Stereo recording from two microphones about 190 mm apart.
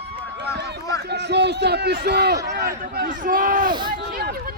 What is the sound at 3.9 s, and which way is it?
Speech, 55° right (ahead or behind).